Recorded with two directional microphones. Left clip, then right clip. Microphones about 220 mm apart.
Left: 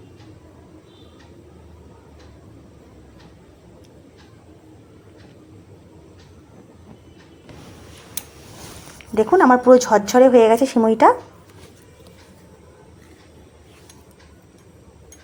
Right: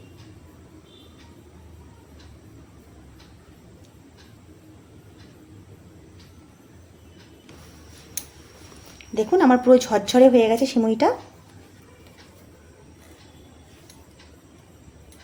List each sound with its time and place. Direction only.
9.1 s speech: centre (ahead or behind)
9.6 s speech: 10° right (ahead or behind)